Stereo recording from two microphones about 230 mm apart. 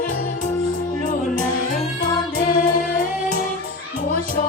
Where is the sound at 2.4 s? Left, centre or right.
Left.